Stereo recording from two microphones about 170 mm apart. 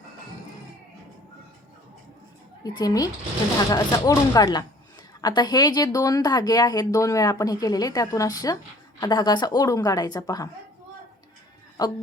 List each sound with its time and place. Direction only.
2.6 s speech: 20° left (ahead or behind)